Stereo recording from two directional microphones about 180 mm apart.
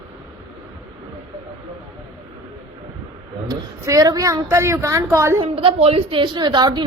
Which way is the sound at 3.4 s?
20° right (ahead or behind).